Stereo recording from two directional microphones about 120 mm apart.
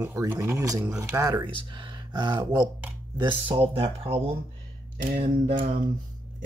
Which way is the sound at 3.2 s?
45° right (ahead or behind).